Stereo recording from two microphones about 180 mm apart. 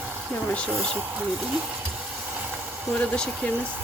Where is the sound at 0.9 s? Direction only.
10° right (ahead or behind).